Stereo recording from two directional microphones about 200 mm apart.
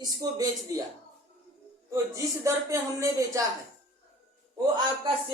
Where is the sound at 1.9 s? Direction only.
15° right (ahead or behind).